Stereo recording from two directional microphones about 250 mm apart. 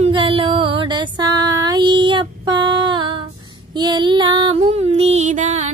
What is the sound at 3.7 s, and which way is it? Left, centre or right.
Female singing, centre.